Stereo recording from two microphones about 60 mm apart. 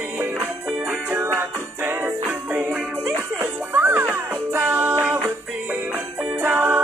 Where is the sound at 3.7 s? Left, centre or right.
Right.